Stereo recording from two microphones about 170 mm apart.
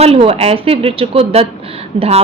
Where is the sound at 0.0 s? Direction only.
35° right (ahead or behind).